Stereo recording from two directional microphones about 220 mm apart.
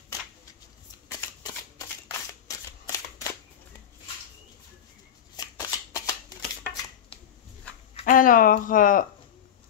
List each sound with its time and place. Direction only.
1.4 s shuffling cards: 15° left (ahead or behind)
2.4 s scissors: 15° left (ahead or behind)
5.3 s shuffling cards: 15° left (ahead or behind)
7.9 s speech: 35° left (ahead or behind)